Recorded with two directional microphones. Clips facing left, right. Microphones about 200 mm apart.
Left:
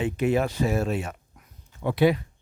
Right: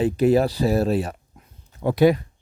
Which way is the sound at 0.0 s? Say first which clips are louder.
Right 6 dB; 35° right (ahead or behind).